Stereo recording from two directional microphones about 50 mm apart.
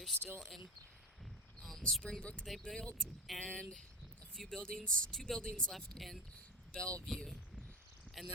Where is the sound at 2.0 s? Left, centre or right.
Centre.